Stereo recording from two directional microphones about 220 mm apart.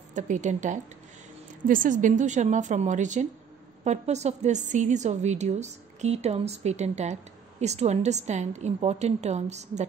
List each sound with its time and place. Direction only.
0.1 s a woman's voice: 35° right (ahead or behind)